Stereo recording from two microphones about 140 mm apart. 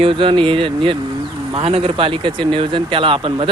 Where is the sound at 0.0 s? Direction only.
40° right (ahead or behind).